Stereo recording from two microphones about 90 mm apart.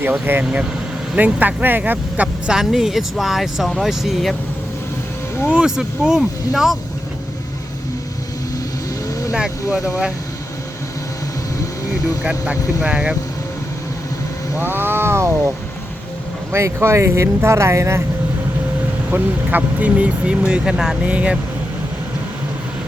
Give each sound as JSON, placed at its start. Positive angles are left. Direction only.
{"t": 0.0, "sound": "a sound", "side_deg": -25}
{"t": 1.1, "sound": "speech", "side_deg": -20}
{"t": 5.5, "sound": "speech", "side_deg": -10}
{"t": 9.3, "sound": "speech", "side_deg": -10}
{"t": 12.2, "sound": "speech", "side_deg": -15}
{"t": 14.6, "sound": "a sound", "side_deg": -25}
{"t": 16.5, "sound": "speech", "side_deg": -30}
{"t": 19.1, "sound": "speech", "side_deg": -20}